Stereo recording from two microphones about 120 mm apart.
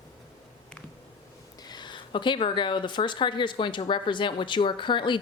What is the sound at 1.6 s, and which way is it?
Speech, 40° left (ahead or behind).